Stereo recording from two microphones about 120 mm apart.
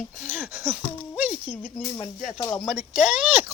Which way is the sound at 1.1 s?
10° right (ahead or behind).